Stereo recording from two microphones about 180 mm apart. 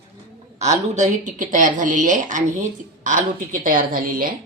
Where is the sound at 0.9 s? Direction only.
45° right (ahead or behind).